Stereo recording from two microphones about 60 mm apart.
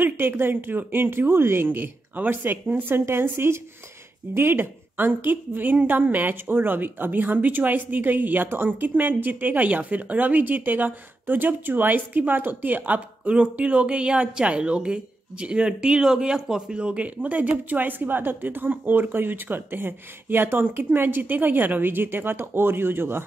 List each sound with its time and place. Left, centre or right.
0.0 s a woman's voice: right